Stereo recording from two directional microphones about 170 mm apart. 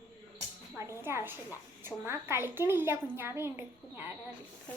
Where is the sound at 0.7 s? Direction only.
15° right (ahead or behind).